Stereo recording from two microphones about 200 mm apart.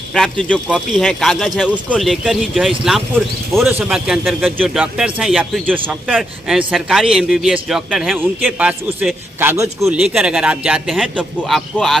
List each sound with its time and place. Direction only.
0.1 s a man's voice: 5° left (ahead or behind)